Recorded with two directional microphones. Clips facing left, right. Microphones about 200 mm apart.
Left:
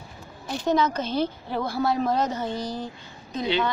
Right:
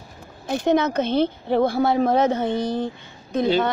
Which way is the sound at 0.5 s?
55° right (ahead or behind).